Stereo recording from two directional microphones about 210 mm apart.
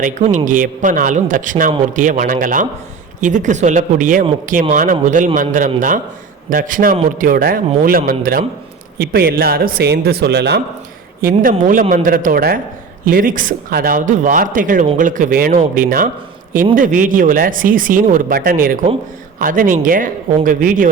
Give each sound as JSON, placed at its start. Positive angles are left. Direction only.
{"t": 0.0, "sound": "a man's voice", "side_deg": -35}